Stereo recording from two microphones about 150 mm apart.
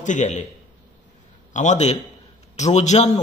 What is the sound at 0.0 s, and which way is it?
Speech, 55° left (ahead or behind).